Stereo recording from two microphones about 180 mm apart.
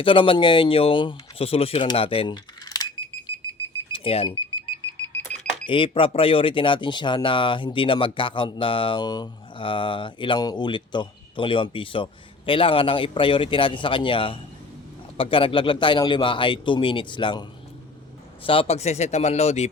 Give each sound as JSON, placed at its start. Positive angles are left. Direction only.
{"t": 0.0, "sound": "speech", "side_deg": 30}
{"t": 3.9, "sound": "speech", "side_deg": 30}
{"t": 5.0, "sound": "alarm clock", "side_deg": 10}
{"t": 5.6, "sound": "speech", "side_deg": 30}
{"t": 18.4, "sound": "speech", "side_deg": 35}